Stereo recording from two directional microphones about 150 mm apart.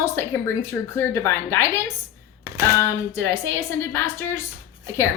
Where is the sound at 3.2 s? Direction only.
20° left (ahead or behind).